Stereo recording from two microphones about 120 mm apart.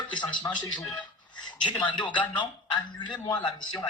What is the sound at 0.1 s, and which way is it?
Speech, 40° left (ahead or behind).